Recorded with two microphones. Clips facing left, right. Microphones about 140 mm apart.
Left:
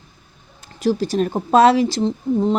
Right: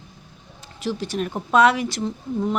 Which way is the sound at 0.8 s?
40° left (ahead or behind).